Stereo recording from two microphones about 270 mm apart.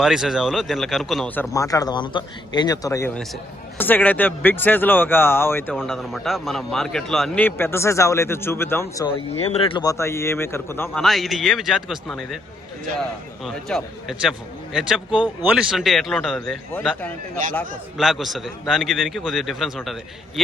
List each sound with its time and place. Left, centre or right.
0.0 s a man's voice: centre
9.1 s speech: left; by 12.4 s centre
13.4 s a man's voice: centre